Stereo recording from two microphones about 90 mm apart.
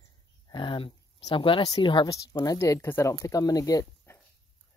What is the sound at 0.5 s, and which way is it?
Speech, 65° left (ahead or behind).